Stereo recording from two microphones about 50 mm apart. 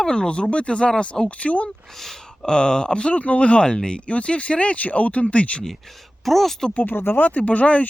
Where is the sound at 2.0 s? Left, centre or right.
Centre.